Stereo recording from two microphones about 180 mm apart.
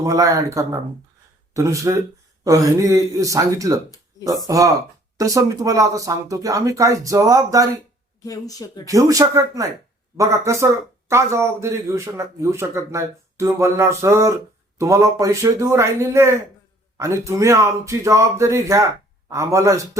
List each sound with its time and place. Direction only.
0.0 s speech: 20° right (ahead or behind)
8.2 s speech: 20° left (ahead or behind)
8.9 s speech: 20° right (ahead or behind)